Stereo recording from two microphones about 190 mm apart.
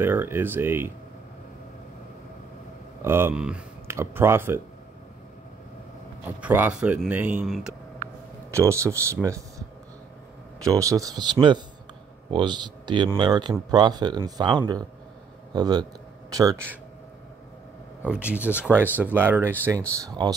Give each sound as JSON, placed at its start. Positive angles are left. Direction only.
{"t": 0.0, "sound": "speech", "side_deg": -10}
{"t": 3.0, "sound": "speech", "side_deg": -10}
{"t": 6.2, "sound": "speech", "side_deg": -10}
{"t": 8.5, "sound": "speech", "side_deg": -15}
{"t": 10.6, "sound": "speech", "side_deg": -15}
{"t": 18.0, "sound": "speech", "side_deg": -5}